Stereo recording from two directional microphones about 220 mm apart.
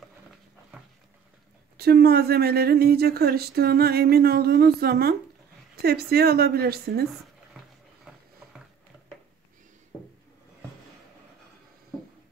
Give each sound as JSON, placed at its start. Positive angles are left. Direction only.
{"t": 1.8, "sound": "speech", "side_deg": -45}